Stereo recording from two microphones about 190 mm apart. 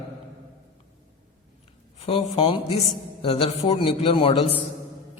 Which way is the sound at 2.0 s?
30° left (ahead or behind).